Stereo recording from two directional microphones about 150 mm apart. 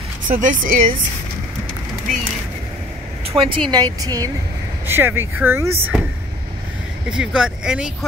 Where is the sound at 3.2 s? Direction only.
35° right (ahead or behind).